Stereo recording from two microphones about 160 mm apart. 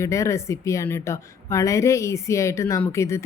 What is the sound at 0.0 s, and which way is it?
Speech, 20° left (ahead or behind).